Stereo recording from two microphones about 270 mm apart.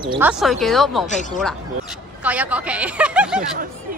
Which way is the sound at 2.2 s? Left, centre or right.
Centre.